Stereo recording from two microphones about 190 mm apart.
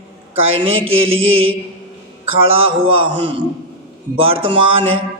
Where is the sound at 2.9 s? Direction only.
25° right (ahead or behind).